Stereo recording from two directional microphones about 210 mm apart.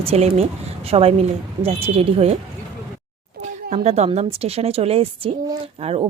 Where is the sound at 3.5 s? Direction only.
30° right (ahead or behind).